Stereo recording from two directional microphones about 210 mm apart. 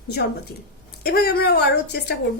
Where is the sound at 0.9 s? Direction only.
45° left (ahead or behind).